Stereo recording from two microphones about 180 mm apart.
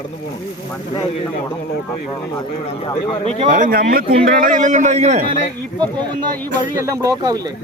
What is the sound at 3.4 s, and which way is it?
A man's voice, 45° right (ahead or behind).